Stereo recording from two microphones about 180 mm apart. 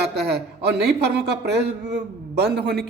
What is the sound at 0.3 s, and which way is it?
A man's voice, 65° right (ahead or behind).